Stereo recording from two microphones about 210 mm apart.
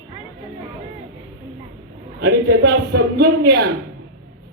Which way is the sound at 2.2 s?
55° right (ahead or behind).